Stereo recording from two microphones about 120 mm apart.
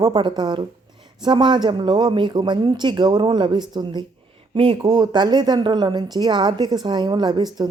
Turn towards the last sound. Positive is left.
turn(degrees=-35)  # may be behind; listen again after turning